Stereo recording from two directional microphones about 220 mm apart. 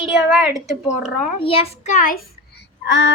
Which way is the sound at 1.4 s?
25° left (ahead or behind).